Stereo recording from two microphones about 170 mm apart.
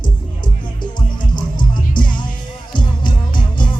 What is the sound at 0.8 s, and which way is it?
Music, 25° left (ahead or behind).